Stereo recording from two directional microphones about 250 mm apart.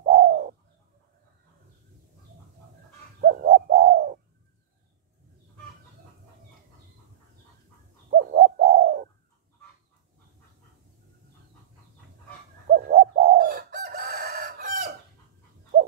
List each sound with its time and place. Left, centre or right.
0.0 s bird: right
3.2 s bird: right
8.1 s bird: right
12.6 s bird: right